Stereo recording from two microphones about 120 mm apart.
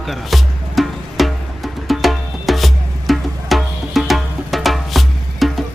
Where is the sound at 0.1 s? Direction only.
Centre (ahead or behind).